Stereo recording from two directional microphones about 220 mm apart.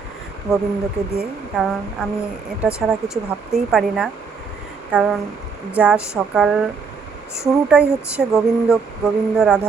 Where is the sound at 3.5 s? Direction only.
Centre (ahead or behind).